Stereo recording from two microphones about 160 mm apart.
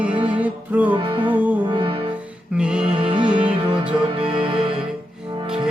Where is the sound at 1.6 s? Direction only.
30° right (ahead or behind).